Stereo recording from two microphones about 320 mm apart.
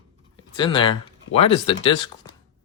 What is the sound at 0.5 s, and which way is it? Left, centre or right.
Speech, centre.